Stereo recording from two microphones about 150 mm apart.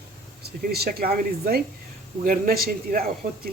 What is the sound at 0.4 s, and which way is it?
Speech, 90° right.